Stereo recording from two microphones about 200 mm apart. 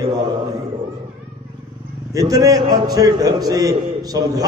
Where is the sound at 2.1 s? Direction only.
20° right (ahead or behind).